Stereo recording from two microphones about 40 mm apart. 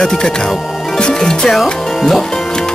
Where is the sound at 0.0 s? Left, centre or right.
Centre.